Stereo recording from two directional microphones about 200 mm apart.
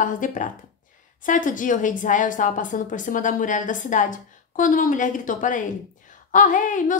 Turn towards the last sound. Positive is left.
turn(degrees=40)  # may be behind; listen again after turning